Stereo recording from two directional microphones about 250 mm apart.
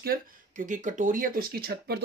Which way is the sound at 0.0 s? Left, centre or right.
Right.